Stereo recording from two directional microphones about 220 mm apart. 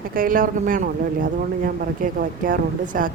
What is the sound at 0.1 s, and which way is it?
Speech, 40° right (ahead or behind).